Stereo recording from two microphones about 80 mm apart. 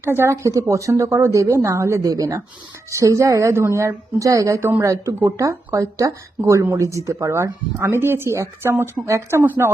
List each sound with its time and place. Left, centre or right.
0.0 s speech: right
8.7 s speech: right
9.0 s speech: right